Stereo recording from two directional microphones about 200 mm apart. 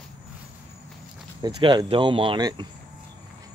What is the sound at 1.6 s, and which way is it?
Speech, 25° right (ahead or behind).